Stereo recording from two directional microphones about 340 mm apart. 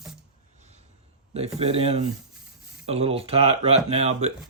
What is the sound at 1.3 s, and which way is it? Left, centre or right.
Speech, centre.